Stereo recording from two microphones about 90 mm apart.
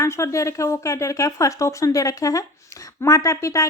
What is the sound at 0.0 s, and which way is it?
A woman's voice, 35° left (ahead or behind).